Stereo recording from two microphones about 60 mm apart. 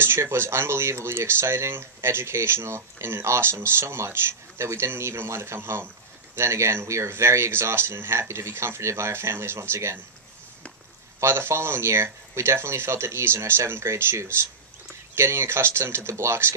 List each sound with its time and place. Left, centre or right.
0.0 s speech: right
11.1 s speech: right